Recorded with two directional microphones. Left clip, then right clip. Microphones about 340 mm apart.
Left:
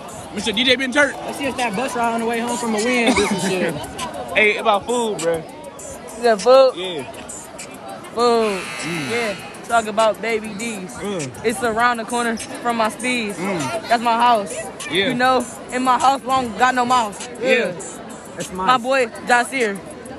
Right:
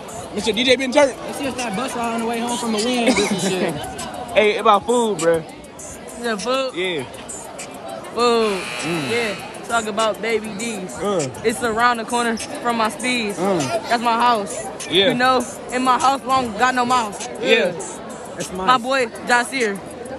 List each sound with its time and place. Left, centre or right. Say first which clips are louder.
0.4 s a man's voice: even; centre
4.8 s speech: right 2 dB; right
6.2 s speech: left 8 dB; centre
8.2 s speech: even; centre